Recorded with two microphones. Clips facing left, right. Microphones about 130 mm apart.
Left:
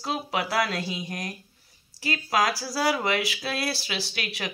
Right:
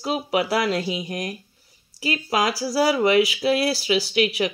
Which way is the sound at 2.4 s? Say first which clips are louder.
Right 4 dB; 20° right (ahead or behind).